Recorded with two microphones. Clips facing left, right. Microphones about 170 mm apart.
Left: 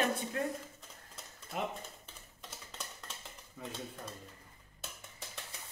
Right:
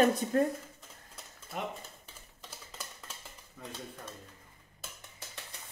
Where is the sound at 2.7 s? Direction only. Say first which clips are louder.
Even; centre (ahead or behind).